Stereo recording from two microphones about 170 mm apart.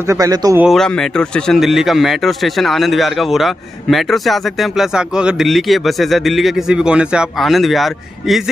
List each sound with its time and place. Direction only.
0.0 s a man's voice: 20° right (ahead or behind)
0.6 s speech: centre (ahead or behind)